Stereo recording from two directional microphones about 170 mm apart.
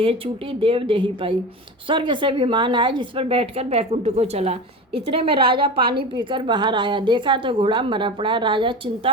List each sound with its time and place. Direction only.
0.6 s a woman's voice: 30° right (ahead or behind)